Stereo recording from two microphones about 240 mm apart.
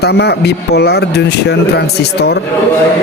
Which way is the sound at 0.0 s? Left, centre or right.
Left.